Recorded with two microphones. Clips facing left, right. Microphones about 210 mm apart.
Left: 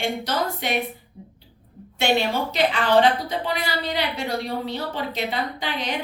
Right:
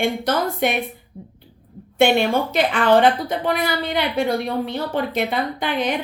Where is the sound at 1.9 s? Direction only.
55° right (ahead or behind).